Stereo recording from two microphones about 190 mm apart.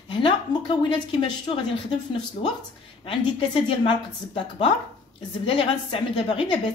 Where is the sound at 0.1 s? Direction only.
25° left (ahead or behind).